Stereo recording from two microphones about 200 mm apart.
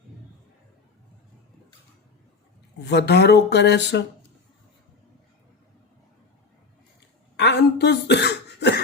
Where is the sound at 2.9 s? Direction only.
55° left (ahead or behind).